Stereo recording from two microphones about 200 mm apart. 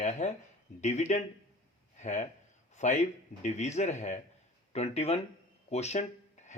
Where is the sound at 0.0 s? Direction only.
35° left (ahead or behind).